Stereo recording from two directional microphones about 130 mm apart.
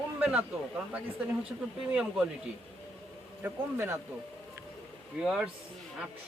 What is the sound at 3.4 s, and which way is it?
Speech, 20° right (ahead or behind).